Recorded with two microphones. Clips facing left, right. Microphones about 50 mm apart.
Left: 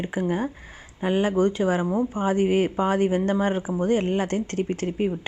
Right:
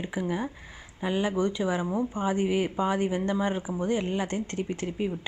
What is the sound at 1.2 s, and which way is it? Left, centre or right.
Speech, left.